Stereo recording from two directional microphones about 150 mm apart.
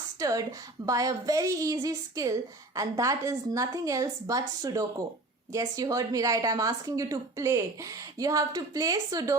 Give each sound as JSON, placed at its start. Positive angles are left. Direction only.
{"t": 0.2, "sound": "a woman's voice", "side_deg": -20}